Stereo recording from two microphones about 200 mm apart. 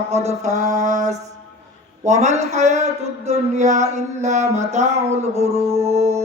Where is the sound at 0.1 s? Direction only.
35° right (ahead or behind).